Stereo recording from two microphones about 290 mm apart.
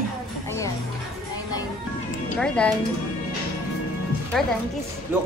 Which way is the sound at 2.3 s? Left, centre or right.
Centre.